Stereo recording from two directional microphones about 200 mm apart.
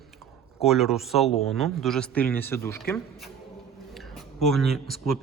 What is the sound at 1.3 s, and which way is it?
Speech, 30° left (ahead or behind).